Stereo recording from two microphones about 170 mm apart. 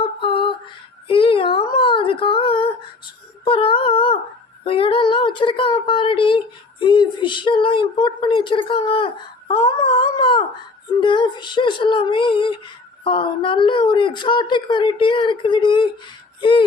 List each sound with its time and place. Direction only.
0.0 s a sound: 30° left (ahead or behind)
4.6 s a woman's voice: 30° left (ahead or behind)
9.5 s wail: 30° left (ahead or behind)
11.0 s a woman's voice: 30° left (ahead or behind)